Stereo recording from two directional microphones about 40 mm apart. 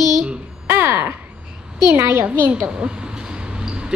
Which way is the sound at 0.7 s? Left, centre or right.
Right.